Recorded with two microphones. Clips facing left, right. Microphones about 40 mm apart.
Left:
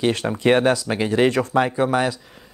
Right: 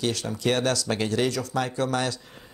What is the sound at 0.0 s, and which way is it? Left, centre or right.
Speech, left.